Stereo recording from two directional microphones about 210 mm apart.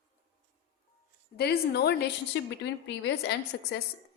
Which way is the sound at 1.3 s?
50° left (ahead or behind).